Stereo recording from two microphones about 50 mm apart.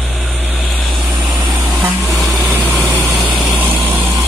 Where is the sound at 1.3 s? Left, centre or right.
Right.